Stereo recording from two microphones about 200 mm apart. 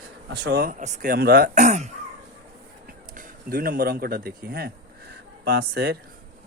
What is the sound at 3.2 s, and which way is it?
Speech, 45° right (ahead or behind).